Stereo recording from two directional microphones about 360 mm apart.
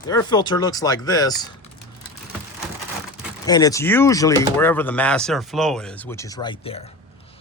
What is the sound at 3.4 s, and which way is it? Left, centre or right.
Speech, centre.